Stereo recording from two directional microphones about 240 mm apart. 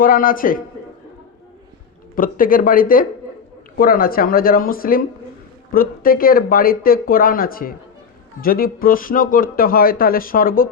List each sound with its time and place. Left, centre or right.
0.0 s speech: left
2.1 s speech: left